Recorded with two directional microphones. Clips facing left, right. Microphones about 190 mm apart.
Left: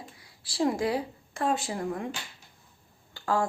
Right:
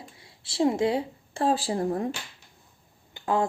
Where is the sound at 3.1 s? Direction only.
20° right (ahead or behind).